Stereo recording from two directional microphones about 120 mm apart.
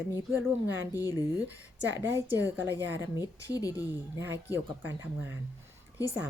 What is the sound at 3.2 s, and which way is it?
Speech, 30° left (ahead or behind).